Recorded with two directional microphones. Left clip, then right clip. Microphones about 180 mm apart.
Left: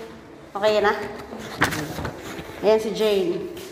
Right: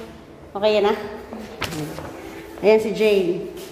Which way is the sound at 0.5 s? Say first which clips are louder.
Right 1 dB; 30° right (ahead or behind).